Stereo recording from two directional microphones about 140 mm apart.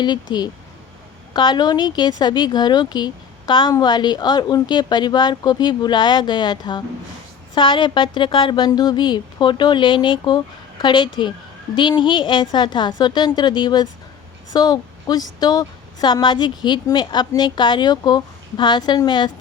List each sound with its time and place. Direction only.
0.0 s a woman's voice: 30° left (ahead or behind)